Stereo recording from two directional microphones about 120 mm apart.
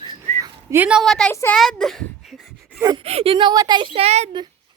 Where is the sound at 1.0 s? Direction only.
5° left (ahead or behind).